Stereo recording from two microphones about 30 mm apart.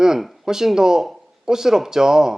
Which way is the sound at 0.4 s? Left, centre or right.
Centre.